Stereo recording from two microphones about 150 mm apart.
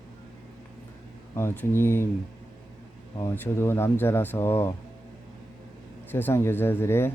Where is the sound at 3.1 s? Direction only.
15° left (ahead or behind).